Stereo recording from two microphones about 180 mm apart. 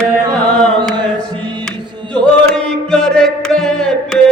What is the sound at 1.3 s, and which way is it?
Mantra, 25° right (ahead or behind).